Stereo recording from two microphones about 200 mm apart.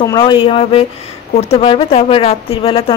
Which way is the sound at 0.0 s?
20° left (ahead or behind).